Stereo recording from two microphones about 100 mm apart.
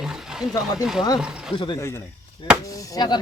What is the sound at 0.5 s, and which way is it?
Speech, 40° left (ahead or behind).